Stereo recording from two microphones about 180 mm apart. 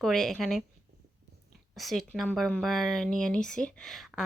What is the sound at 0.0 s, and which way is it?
Speech, centre (ahead or behind).